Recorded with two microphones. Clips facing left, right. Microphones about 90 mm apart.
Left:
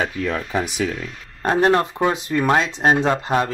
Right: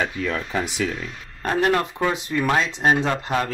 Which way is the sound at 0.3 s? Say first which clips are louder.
Left 2 dB; 20° left (ahead or behind).